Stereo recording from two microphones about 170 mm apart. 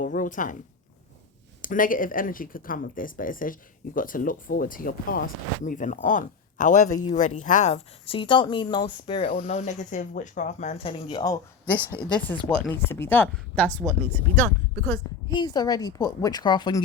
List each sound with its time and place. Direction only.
0.0 s speech: 50° left (ahead or behind)
1.6 s speech: 50° left (ahead or behind); by 11.3 s 25° left (ahead or behind)
12.5 s a woman's voice: 5° left (ahead or behind); by 16.8 s 25° left (ahead or behind)